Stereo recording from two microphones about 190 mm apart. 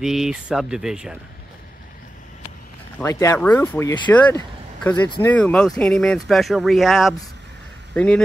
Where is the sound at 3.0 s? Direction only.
15° left (ahead or behind).